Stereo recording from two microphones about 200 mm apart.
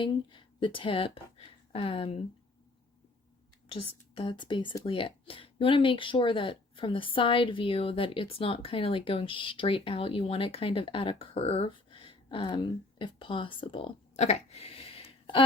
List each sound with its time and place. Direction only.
0.0 s speech: 25° left (ahead or behind)
4.1 s a woman's voice: 25° left (ahead or behind)